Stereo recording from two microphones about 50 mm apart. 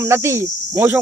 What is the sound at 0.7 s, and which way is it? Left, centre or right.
Cricket, right.